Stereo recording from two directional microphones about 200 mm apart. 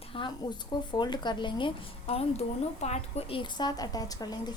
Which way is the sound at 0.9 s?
20° left (ahead or behind).